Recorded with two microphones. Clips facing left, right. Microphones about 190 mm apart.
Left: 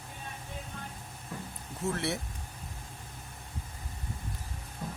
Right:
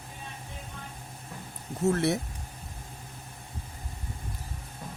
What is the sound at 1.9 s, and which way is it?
Speech, 45° right (ahead or behind).